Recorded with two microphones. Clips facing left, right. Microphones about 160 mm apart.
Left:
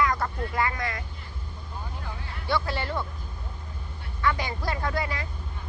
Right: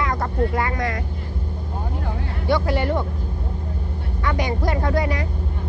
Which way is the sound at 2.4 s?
15° right (ahead or behind).